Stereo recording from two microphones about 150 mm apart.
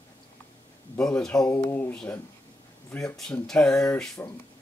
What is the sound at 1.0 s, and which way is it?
Speech, 5° left (ahead or behind).